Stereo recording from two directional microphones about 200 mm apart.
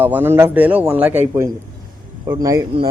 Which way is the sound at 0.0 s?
10° right (ahead or behind).